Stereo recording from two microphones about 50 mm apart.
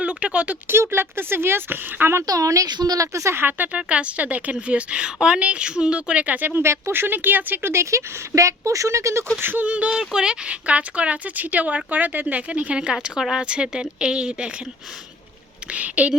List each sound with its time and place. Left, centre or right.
0.0 s a sound: right
0.7 s speech: right
2.1 s speech: right
3.3 s speech: right
3.7 s speech: right
6.6 s speech: right
6.9 s speech: right
7.7 s speech: right
9.4 s speech: right
9.6 s speech: right
9.9 s speech: centre
15.7 s speech: right